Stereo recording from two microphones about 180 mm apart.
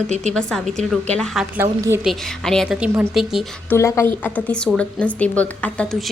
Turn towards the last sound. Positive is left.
turn(degrees=5)  # may be behind; listen again after turning